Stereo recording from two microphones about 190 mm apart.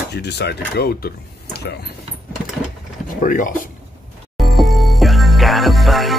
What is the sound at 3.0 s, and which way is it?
Speech, 45° left (ahead or behind).